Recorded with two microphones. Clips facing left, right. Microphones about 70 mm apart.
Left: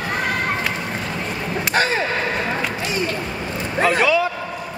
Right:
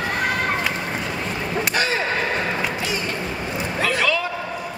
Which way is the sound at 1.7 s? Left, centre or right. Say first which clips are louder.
Left 5 dB; left.